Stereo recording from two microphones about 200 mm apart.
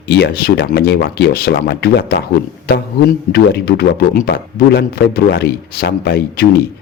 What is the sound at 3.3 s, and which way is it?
A man's voice, 55° left (ahead or behind).